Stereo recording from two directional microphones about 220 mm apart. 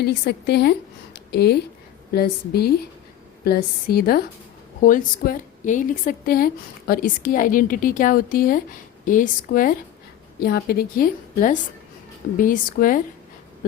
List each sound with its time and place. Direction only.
0.0 s a woman's voice: 50° left (ahead or behind)